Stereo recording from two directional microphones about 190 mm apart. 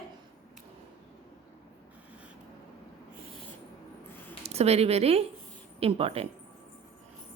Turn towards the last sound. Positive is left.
turn(degrees=-30)  # may be behind; listen again after turning